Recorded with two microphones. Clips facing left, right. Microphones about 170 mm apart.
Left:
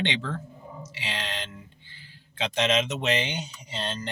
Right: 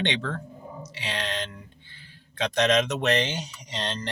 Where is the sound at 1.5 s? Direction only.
60° right (ahead or behind).